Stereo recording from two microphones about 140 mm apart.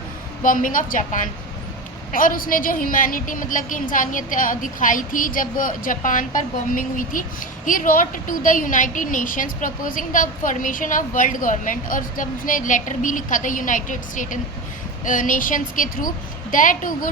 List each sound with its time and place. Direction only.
0.4 s speech: 70° left (ahead or behind)
2.1 s speech: 85° left